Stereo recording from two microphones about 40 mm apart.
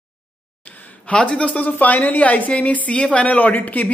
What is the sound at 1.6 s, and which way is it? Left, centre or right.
Speech, left.